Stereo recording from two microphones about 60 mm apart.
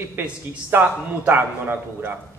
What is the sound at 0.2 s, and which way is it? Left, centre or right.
A man's voice, right.